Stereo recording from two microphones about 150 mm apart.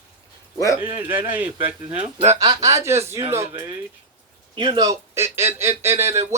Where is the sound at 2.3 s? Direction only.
20° right (ahead or behind).